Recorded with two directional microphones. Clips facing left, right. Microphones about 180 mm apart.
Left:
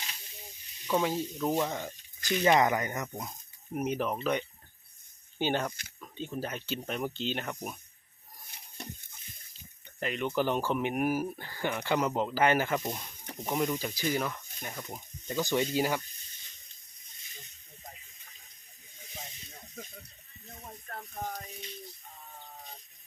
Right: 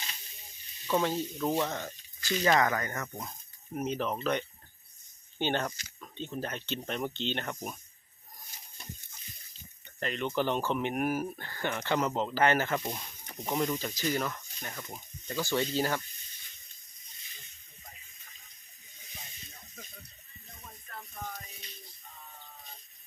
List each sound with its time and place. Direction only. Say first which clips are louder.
0.9 s speech: even; 10° left (ahead or behind)
10.0 s speech: left 1 dB; 5° left (ahead or behind)
21.2 s a sound: left 4 dB; 45° left (ahead or behind)